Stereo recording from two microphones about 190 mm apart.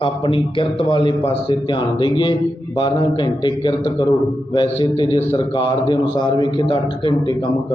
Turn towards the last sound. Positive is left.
turn(degrees=25)  # may be behind; listen again after turning